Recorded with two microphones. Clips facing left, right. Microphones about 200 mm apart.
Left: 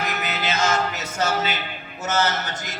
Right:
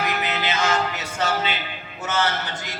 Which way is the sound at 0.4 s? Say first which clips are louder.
Left 2 dB; 45° left (ahead or behind).